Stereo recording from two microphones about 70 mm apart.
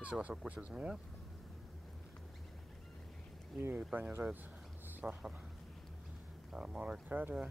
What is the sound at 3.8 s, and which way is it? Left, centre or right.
Speech, centre.